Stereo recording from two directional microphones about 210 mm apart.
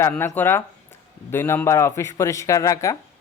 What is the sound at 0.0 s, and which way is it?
A man's voice, 10° left (ahead or behind).